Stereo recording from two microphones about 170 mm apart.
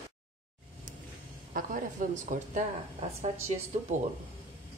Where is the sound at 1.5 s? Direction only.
55° right (ahead or behind).